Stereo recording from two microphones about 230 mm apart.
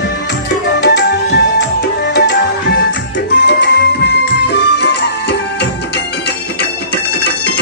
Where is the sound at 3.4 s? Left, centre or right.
Left.